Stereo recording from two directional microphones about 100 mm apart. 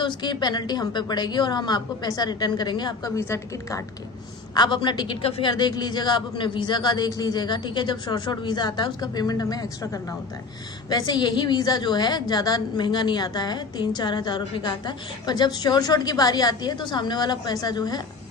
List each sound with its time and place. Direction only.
0.0 s a woman's voice: 50° left (ahead or behind)
3.2 s a woman's voice: 25° left (ahead or behind)
4.6 s a woman's voice: 50° left (ahead or behind)
10.9 s a woman's voice: 45° left (ahead or behind)